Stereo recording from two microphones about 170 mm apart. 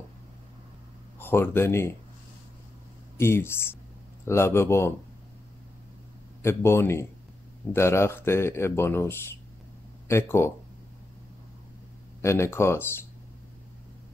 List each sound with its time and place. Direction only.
1.2 s speech: 15° left (ahead or behind)
3.2 s speech: 15° left (ahead or behind)
6.4 s speech: 15° left (ahead or behind)
12.2 s speech: 15° left (ahead or behind)